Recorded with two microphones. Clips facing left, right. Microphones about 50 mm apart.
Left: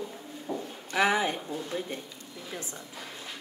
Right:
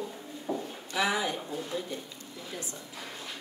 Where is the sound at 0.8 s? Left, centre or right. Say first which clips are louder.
Left 4 dB; left.